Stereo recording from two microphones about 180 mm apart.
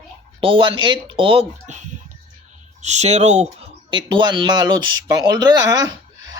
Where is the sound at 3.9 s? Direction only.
25° right (ahead or behind).